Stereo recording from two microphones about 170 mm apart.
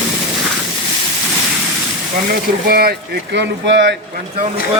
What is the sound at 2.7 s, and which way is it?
Speech, 65° right (ahead or behind).